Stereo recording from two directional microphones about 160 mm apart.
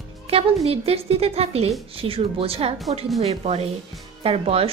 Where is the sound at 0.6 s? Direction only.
40° right (ahead or behind).